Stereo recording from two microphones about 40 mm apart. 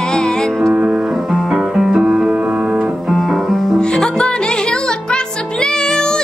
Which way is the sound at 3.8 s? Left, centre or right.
Left.